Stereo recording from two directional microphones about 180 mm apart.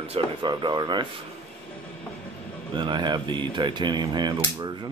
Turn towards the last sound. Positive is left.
turn(degrees=-25)  # may be behind; listen again after turning